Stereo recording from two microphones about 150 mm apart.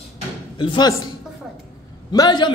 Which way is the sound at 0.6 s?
35° left (ahead or behind).